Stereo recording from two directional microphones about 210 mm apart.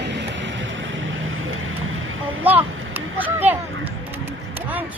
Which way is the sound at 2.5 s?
10° right (ahead or behind).